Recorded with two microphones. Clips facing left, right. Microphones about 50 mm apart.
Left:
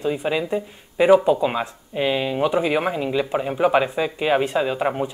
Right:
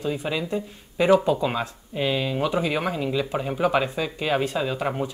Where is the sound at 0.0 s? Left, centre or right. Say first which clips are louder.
Left 4 dB; centre.